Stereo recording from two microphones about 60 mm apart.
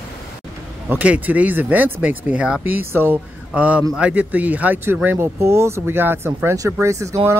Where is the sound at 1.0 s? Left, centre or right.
Right.